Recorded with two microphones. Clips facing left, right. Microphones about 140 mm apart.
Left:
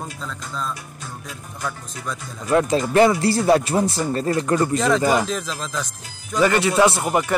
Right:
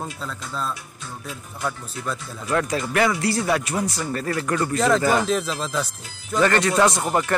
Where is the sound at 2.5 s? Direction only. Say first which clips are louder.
Left 6 dB; 25° left (ahead or behind).